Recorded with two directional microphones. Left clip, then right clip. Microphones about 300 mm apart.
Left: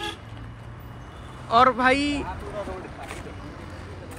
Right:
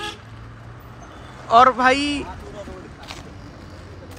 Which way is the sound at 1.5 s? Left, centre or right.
Centre.